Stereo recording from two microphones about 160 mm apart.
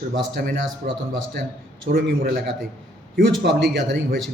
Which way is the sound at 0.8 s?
70° right (ahead or behind).